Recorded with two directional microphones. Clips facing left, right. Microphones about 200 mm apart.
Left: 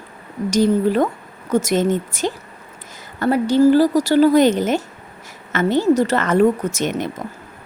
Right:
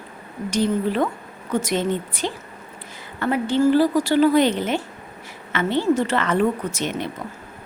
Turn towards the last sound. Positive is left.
turn(degrees=45)  # may be behind; listen again after turning